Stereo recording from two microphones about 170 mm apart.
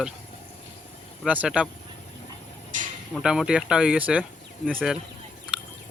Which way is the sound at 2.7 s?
50° right (ahead or behind).